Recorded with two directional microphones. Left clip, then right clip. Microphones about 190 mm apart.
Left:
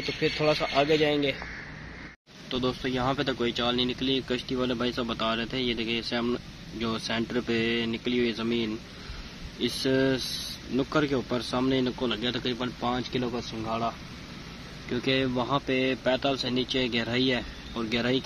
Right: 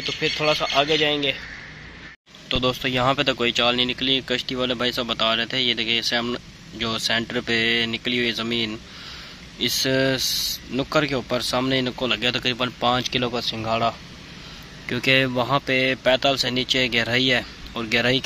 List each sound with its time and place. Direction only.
0.0 s speech: centre (ahead or behind)
2.4 s speech: 20° right (ahead or behind)
14.9 s speech: 15° right (ahead or behind)